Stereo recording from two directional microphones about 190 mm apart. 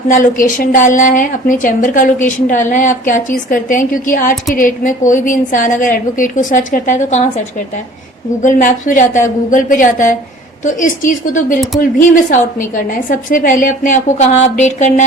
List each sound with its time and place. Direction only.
0.1 s a woman's voice: 45° left (ahead or behind)